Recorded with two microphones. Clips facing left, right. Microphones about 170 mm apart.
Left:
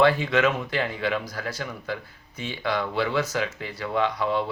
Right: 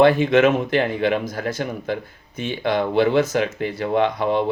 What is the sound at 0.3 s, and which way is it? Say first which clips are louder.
Speech: right 7 dB; 20° right (ahead or behind).